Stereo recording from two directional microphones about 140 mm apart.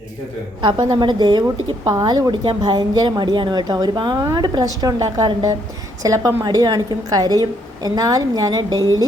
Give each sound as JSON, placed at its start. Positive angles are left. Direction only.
{"t": 0.6, "sound": "a woman's voice", "side_deg": -30}